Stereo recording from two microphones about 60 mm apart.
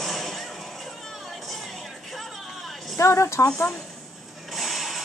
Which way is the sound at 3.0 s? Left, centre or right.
Left.